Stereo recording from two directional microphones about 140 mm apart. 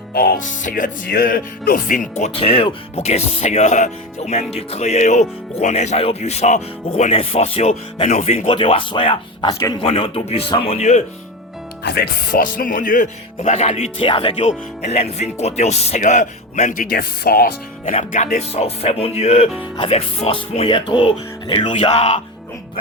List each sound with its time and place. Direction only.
0.1 s speech: 90° left; by 8.4 s 60° left (ahead or behind)
8.4 s speech: 40° left (ahead or behind)
12.4 s music: 75° left (ahead or behind)
13.4 s speech: 50° left (ahead or behind)
14.3 s speech: 55° left (ahead or behind); by 17.9 s 90° left
18.1 s speech: 65° left (ahead or behind); by 21.7 s 35° left (ahead or behind)
21.8 s speech: 50° left (ahead or behind)